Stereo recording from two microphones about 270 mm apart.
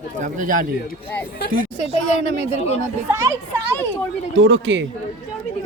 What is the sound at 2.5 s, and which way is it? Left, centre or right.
Speech, left.